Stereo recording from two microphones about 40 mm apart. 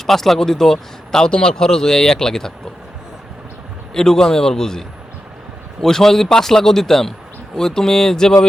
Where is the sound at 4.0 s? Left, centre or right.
Centre.